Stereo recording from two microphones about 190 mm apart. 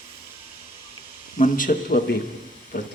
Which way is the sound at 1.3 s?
45° left (ahead or behind).